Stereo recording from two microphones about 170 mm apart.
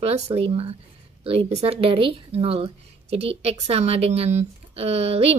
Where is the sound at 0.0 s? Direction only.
35° right (ahead or behind).